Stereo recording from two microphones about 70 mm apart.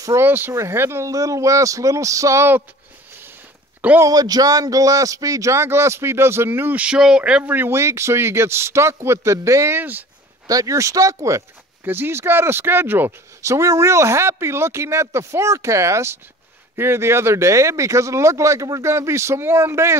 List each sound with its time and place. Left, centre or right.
0.2 s speech: right
1.1 s speech: right
4.1 s speech: right
6.8 s speech: centre
7.4 s speech: right
10.4 s speech: right
11.8 s speech: right
13.4 s speech: right